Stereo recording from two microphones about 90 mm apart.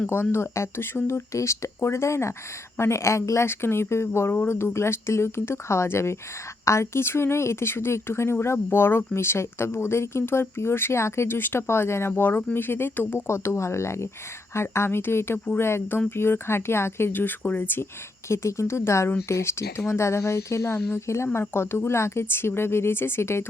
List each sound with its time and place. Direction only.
0.1 s a woman's voice: 25° left (ahead or behind)